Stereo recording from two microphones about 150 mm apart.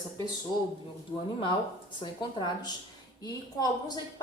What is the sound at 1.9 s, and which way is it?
A woman's voice, 30° left (ahead or behind).